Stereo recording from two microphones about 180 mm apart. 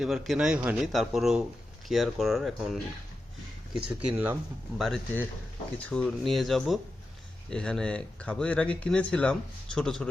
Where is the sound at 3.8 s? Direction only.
10° right (ahead or behind).